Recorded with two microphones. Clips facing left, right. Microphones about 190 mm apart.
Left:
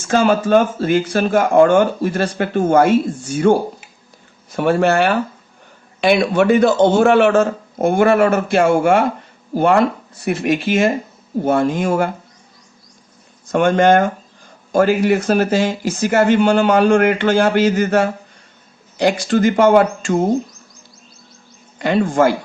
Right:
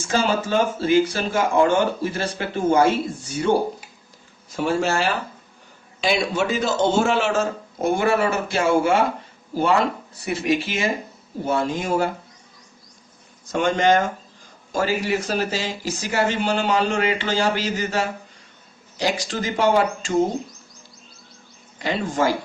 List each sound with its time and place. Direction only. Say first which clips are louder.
0.1 s a man's voice: left 8 dB; 55° left (ahead or behind)
4.5 s a man's voice: left 7 dB; 60° left (ahead or behind)
13.5 s a man's voice: left 6 dB; 55° left (ahead or behind)
21.8 s a man's voice: left 8 dB; 55° left (ahead or behind)